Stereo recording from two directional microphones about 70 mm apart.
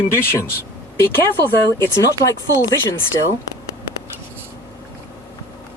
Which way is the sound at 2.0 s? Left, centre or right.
Left.